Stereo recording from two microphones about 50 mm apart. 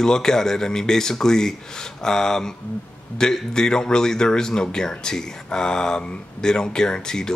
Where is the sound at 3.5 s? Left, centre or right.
Centre.